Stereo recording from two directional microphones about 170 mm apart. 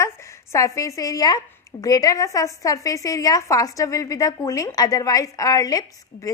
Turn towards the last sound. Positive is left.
turn(degrees=20)  # may be behind; listen again after turning